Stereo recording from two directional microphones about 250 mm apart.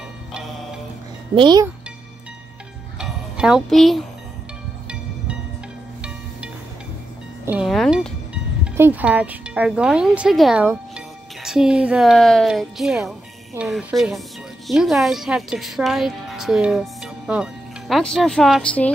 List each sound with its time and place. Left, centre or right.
1.3 s speech: centre
3.0 s music: centre
7.4 s a woman's voice: centre